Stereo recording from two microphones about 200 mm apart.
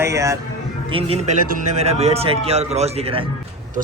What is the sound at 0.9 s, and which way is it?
Speech, 30° right (ahead or behind).